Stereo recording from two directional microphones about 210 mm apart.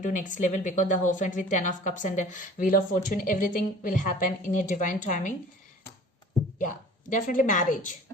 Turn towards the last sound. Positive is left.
turn(degrees=40)  # may be behind; listen again after turning